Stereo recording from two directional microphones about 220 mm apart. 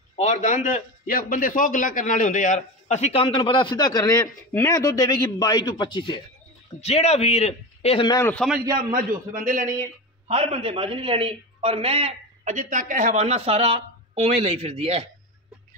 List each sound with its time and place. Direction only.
0.1 s a man's voice: 30° left (ahead or behind); by 8.5 s 10° left (ahead or behind)
8.7 s a man's voice: 40° right (ahead or behind)